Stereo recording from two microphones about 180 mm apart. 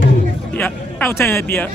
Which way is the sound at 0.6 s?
10° left (ahead or behind).